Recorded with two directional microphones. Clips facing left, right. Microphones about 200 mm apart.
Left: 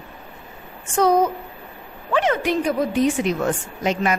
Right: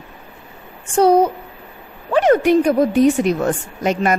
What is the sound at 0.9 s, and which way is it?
Speech, 30° right (ahead or behind).